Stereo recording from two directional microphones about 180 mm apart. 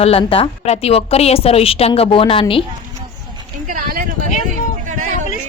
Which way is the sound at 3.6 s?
50° right (ahead or behind).